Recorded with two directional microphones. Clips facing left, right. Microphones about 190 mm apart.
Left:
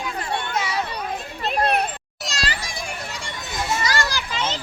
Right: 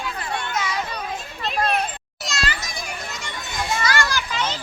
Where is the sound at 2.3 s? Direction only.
35° left (ahead or behind).